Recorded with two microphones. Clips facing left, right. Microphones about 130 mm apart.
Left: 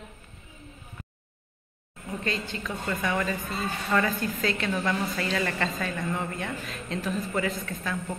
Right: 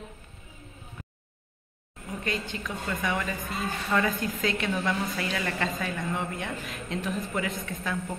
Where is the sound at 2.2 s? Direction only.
10° right (ahead or behind).